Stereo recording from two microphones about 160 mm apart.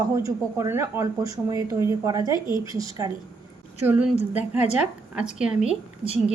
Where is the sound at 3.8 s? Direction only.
10° right (ahead or behind).